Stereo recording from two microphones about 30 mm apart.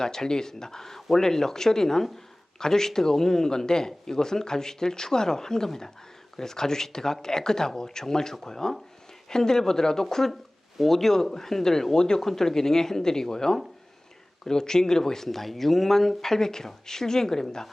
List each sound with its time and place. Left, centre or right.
0.0 s speech: left
11.9 s speech: left
12.2 s speech: centre